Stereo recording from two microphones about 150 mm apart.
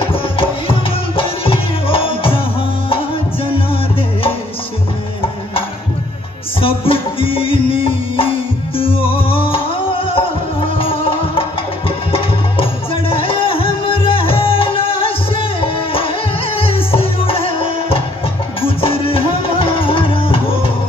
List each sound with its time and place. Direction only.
0.1 s music: 35° left (ahead or behind)
6.6 s music: 40° left (ahead or behind)
13.1 s music: 40° left (ahead or behind)